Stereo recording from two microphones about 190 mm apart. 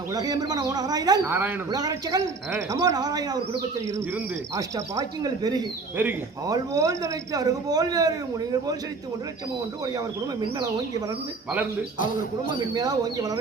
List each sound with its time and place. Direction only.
0.1 s speech: 20° right (ahead or behind)
12.7 s speech: 20° right (ahead or behind)